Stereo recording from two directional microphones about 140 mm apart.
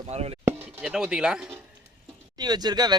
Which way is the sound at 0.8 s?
5° right (ahead or behind).